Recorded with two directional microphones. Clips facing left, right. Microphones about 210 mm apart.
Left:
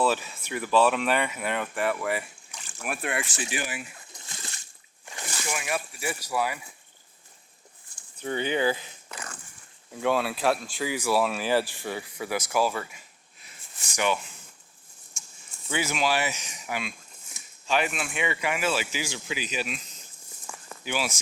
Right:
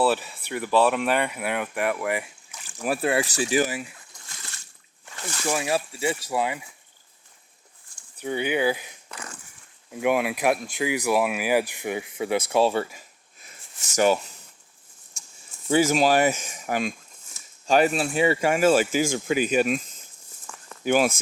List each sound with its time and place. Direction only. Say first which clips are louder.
0.0 s speech: right 3 dB; centre (ahead or behind)
2.8 s speech: right 8 dB; 30° right (ahead or behind)
4.1 s splash: left 2 dB; 20° left (ahead or behind)
5.5 s speech: right 7 dB; 30° right (ahead or behind)
8.2 s speech: right 2 dB; 10° right (ahead or behind)
9.9 s speech: right 3 dB; 15° right (ahead or behind); by 14.3 s 40° right (ahead or behind)
15.1 s a sound: right 1 dB; 35° right (ahead or behind)
15.7 s speech: right 8 dB; 40° right (ahead or behind)
20.5 s a sound: left 1 dB; 10° left (ahead or behind)
20.8 s speech: right 10 dB; 50° right (ahead or behind)